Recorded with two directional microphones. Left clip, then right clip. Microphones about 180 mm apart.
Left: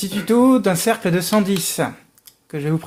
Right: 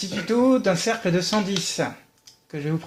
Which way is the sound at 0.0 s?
50° left (ahead or behind).